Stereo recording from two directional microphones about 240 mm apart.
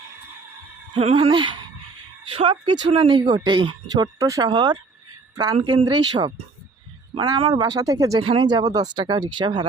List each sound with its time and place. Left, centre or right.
0.9 s a woman's voice: right